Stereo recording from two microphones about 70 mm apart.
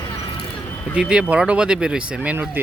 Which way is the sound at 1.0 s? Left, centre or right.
Centre.